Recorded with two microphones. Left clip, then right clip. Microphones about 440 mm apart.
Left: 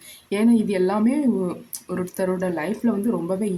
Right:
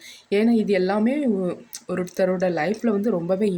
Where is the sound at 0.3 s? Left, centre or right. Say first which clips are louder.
Right 1 dB; left.